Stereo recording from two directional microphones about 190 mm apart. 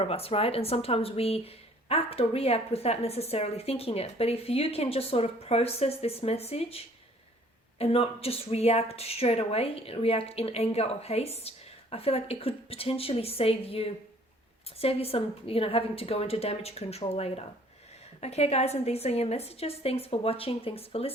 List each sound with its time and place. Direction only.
0.0 s speech: 30° left (ahead or behind)